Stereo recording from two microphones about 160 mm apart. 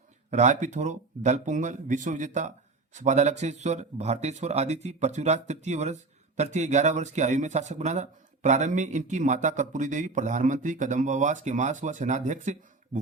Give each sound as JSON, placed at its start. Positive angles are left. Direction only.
{"t": 0.3, "sound": "speech", "side_deg": -45}